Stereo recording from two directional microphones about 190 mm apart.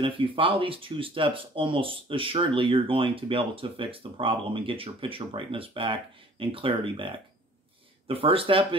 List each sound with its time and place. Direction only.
0.0 s speech: 25° right (ahead or behind)